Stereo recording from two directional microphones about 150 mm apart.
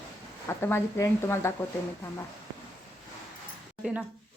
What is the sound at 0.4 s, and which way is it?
A woman's voice, 15° left (ahead or behind).